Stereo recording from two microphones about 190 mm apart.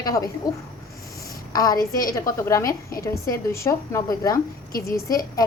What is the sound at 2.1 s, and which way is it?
A woman's voice, 15° left (ahead or behind).